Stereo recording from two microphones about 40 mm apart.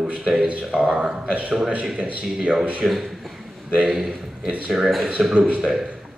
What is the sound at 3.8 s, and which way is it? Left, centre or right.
Speech, centre.